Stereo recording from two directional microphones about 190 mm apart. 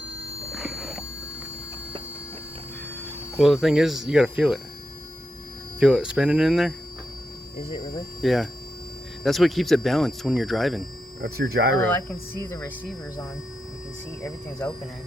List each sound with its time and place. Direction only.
0.5 s music: centre (ahead or behind)
3.3 s speech: centre (ahead or behind)
5.8 s speech: 5° right (ahead or behind)
7.6 s speech: 25° left (ahead or behind)
8.2 s speech: centre (ahead or behind)
11.2 s speech: 55° right (ahead or behind)
12.5 s speech: 5° left (ahead or behind)
14.2 s speech: 15° left (ahead or behind)